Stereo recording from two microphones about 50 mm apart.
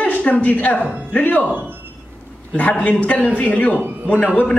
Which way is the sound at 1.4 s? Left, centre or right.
Right.